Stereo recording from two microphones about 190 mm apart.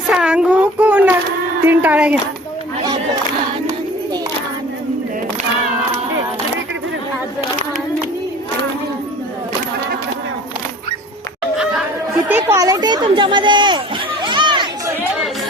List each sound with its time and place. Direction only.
0.1 s a sound: 5° right (ahead or behind)
1.6 s speech: 10° right (ahead or behind)
12.3 s speech: 10° right (ahead or behind)